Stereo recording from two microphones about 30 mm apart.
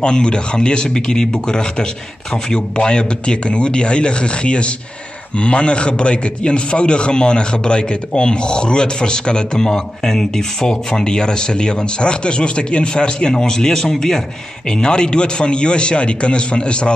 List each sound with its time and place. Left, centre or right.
0.0 s a man's voice: left
12.9 s a man's voice: left